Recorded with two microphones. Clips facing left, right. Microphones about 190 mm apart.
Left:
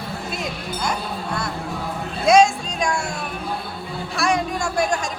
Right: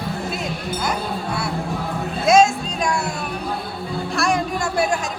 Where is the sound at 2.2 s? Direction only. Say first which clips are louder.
Even; centre (ahead or behind).